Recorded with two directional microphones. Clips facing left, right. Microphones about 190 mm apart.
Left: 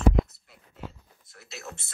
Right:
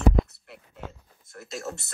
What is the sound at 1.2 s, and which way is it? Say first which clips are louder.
Speech: right 7 dB; 50° right (ahead or behind).